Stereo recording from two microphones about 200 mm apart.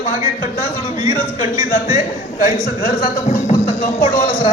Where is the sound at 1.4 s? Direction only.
20° right (ahead or behind).